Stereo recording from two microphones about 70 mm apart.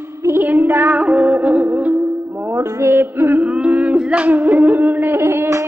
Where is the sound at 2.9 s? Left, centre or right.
Right.